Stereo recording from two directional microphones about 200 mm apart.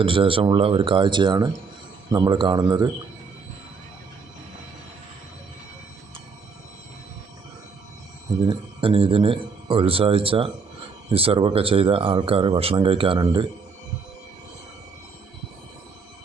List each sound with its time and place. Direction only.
0.0 s speech: 25° right (ahead or behind)
8.4 s speech: 25° right (ahead or behind)